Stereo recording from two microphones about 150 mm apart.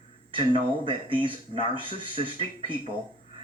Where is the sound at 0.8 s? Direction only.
35° right (ahead or behind).